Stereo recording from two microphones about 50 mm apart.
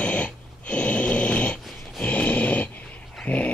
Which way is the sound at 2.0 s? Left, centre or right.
Left.